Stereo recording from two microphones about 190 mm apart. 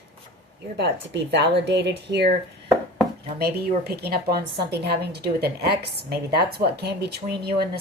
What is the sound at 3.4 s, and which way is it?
A woman's voice, 55° right (ahead or behind).